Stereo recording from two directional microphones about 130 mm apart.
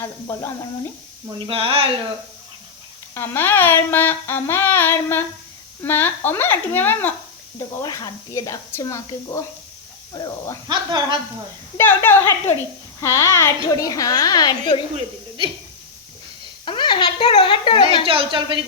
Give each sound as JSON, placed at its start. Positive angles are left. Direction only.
{"t": 0.0, "sound": "a woman's voice", "side_deg": 20}
{"t": 1.4, "sound": "speech", "side_deg": -45}
{"t": 3.2, "sound": "speech", "side_deg": 20}
{"t": 7.8, "sound": "a woman's voice", "side_deg": 25}
{"t": 10.7, "sound": "a woman's voice", "side_deg": -35}
{"t": 11.8, "sound": "a woman's voice", "side_deg": 15}
{"t": 16.6, "sound": "a child's voice", "side_deg": 40}
{"t": 18.0, "sound": "a woman's voice", "side_deg": -45}